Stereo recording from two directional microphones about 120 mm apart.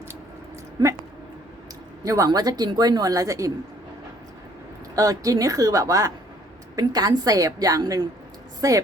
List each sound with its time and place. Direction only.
2.0 s speech: 30° right (ahead or behind)
4.9 s a woman's voice: 30° right (ahead or behind)